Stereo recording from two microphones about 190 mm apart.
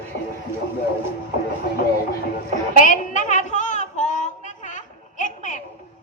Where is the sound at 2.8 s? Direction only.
45° left (ahead or behind).